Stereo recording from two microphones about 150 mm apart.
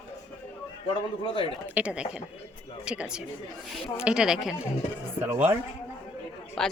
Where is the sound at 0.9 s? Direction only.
35° left (ahead or behind).